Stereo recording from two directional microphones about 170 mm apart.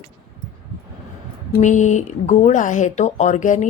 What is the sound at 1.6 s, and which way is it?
A woman's voice, 45° left (ahead or behind).